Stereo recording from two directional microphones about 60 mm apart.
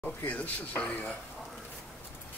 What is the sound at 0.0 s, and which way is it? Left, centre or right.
Speech, left.